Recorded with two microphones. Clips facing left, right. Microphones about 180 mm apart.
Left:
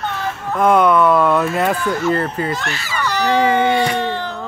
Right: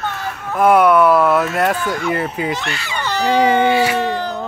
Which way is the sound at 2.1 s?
10° right (ahead or behind).